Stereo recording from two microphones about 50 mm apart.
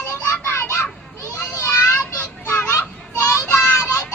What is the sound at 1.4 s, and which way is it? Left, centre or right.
Child singing, left.